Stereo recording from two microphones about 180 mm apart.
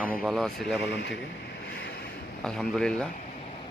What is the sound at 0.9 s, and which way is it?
Speech, 75° left (ahead or behind).